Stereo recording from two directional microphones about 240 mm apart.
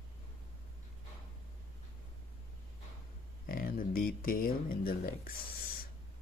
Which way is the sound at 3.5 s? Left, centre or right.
Left.